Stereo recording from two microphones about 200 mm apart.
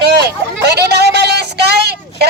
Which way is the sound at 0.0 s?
55° right (ahead or behind).